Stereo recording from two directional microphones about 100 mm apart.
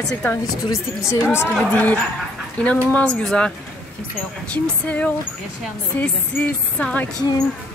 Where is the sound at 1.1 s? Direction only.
25° left (ahead or behind).